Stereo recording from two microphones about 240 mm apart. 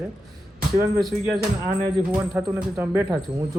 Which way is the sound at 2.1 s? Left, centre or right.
Centre.